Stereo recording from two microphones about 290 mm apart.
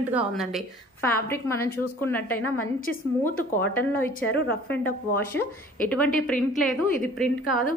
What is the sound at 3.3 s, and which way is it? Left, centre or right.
Speech, left.